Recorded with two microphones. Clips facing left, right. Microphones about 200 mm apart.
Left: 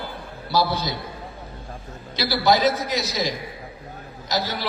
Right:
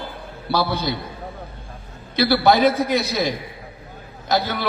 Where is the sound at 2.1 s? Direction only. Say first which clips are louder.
Right 4 dB; 60° right (ahead or behind).